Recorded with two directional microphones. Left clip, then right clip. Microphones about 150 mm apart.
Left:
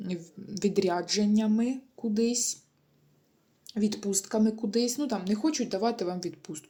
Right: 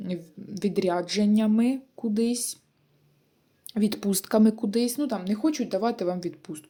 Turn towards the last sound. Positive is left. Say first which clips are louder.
# right 3 dB
turn(degrees=-15)  # may be behind; listen again after turning